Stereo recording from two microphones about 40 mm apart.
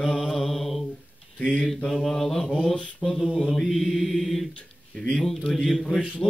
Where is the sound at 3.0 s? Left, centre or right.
Centre.